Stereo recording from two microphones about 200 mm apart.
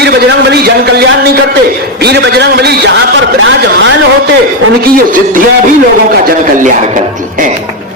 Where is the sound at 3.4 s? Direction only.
65° right (ahead or behind).